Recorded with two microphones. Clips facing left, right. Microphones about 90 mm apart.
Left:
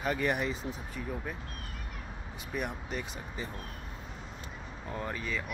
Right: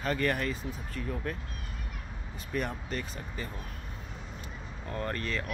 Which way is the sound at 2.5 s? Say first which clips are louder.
Right 2 dB; 10° left (ahead or behind).